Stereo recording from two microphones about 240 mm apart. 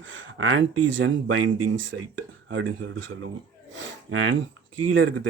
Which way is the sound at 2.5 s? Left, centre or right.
Right.